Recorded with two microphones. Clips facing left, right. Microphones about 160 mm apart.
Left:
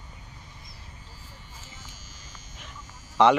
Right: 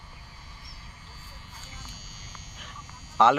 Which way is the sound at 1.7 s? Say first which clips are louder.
Right 1 dB; 90° right.